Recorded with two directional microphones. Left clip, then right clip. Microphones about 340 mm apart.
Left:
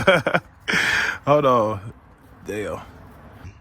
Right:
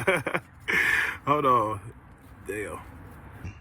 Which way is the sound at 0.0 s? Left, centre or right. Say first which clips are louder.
Left 8 dB; left.